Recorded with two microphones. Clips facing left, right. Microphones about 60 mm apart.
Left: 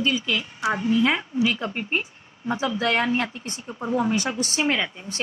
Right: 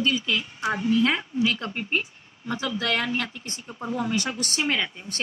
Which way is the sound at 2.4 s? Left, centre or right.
Left.